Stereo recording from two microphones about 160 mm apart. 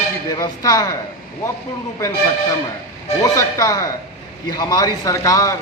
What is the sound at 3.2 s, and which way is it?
A man's voice, 20° left (ahead or behind).